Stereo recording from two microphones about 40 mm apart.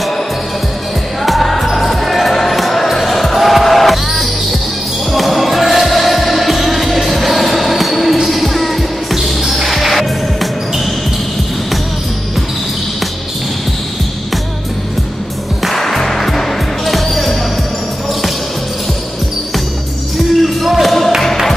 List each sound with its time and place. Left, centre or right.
1.2 s music: centre
15.7 s music: centre
20.6 s music: centre